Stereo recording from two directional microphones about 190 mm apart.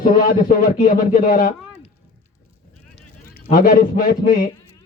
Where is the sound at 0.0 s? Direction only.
50° left (ahead or behind).